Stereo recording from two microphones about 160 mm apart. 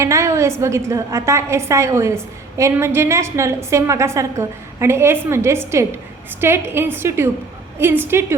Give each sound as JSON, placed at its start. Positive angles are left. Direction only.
{"t": 0.0, "sound": "a woman's voice", "side_deg": -20}